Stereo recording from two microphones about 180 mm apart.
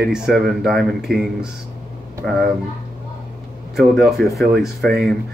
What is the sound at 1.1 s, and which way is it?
Speech, 60° right (ahead or behind).